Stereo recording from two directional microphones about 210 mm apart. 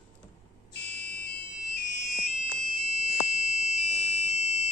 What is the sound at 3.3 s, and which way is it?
Fire alarm, 35° left (ahead or behind).